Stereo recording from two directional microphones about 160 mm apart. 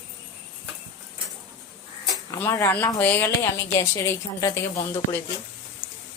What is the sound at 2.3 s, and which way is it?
A woman's voice, 15° left (ahead or behind).